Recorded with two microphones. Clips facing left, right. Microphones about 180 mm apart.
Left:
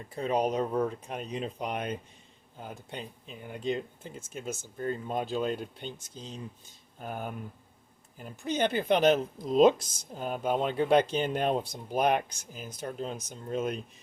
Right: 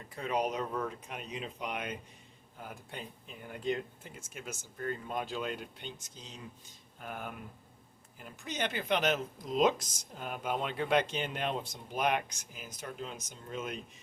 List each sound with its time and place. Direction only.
0.2 s speech: 30° left (ahead or behind)
2.6 s speech: 25° left (ahead or behind)
4.4 s speech: 30° left (ahead or behind)